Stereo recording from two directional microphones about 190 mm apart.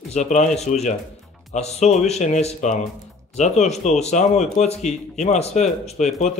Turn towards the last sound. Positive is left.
turn(degrees=35)  # may be behind; listen again after turning